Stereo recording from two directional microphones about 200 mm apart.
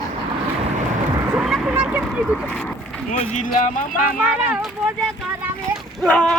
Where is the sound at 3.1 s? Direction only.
40° left (ahead or behind).